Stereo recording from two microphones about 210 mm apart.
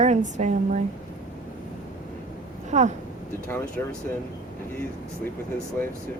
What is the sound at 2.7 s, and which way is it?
Speech, 35° right (ahead or behind).